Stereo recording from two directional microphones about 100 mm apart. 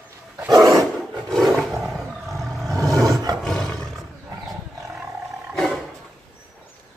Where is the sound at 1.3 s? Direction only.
5° left (ahead or behind).